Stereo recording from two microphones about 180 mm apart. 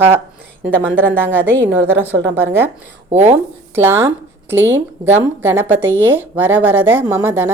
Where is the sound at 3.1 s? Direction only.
40° right (ahead or behind).